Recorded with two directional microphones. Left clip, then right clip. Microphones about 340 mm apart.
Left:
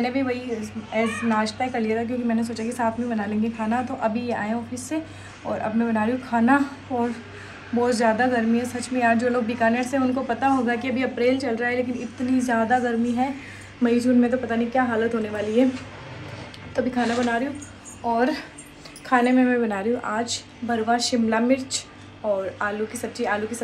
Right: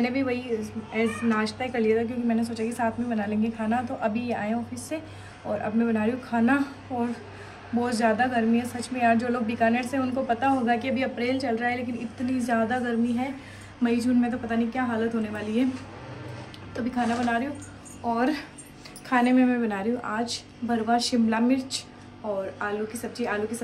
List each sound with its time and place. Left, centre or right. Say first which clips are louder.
0.0 s a woman's voice: left 2 dB; centre